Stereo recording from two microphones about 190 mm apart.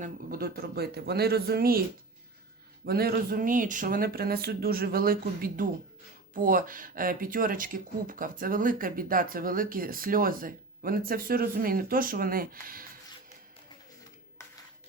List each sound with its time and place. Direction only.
0.0 s speech: 50° right (ahead or behind)
2.8 s speech: 55° right (ahead or behind)